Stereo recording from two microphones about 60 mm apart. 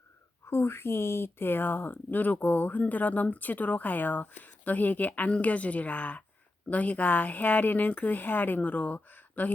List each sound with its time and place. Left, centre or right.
0.4 s speech: left